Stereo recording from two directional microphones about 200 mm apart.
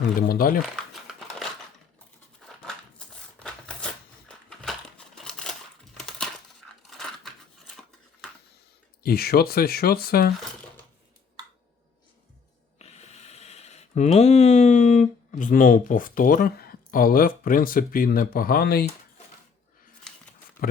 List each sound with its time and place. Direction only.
0.2 s speech: 45° left (ahead or behind)
0.6 s typing: centre (ahead or behind)
3.3 s a sound: 5° left (ahead or behind)
6.0 s coin: centre (ahead or behind)
6.9 s a sound: centre (ahead or behind)
9.0 s speech: 50° left (ahead or behind)
12.8 s speech: 30° left (ahead or behind); by 18.9 s 50° left (ahead or behind)